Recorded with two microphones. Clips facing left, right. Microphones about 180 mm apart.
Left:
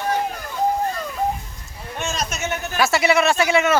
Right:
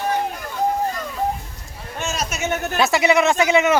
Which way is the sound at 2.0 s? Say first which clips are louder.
Even; 5° right (ahead or behind).